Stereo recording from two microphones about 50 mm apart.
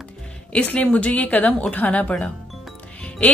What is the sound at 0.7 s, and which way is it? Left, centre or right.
A woman's voice, left.